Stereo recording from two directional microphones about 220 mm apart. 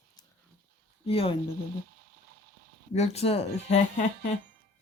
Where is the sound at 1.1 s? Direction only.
25° left (ahead or behind).